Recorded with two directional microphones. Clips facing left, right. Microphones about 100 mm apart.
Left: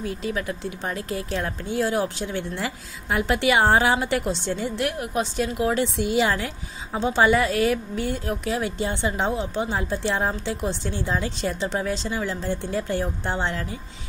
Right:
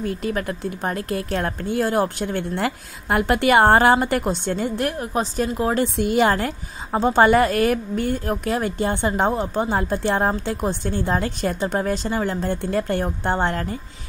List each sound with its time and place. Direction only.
0.0 s a woman's voice: 50° right (ahead or behind)
5.9 s a woman's voice: 50° right (ahead or behind)